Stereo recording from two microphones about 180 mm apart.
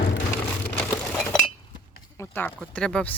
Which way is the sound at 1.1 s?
5° left (ahead or behind).